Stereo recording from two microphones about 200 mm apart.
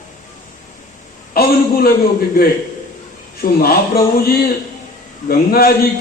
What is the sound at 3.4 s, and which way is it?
Speech, 50° left (ahead or behind).